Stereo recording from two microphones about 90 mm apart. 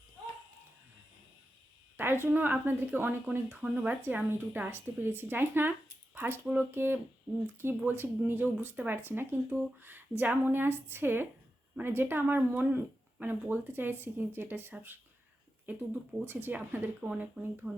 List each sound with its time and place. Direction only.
2.0 s speech: 25° right (ahead or behind)
3.6 s speech: 15° right (ahead or behind)